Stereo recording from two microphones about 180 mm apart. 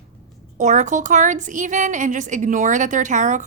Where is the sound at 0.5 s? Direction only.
45° right (ahead or behind).